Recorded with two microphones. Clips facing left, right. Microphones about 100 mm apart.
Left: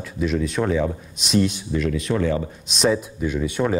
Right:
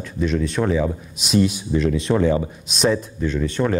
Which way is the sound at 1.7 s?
30° right (ahead or behind).